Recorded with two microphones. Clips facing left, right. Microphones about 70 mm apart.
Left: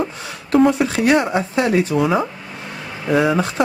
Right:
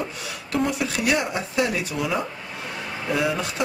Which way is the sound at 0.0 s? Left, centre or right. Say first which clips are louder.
Left 6 dB; left.